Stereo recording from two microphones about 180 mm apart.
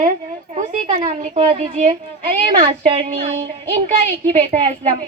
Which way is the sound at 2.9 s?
35° right (ahead or behind).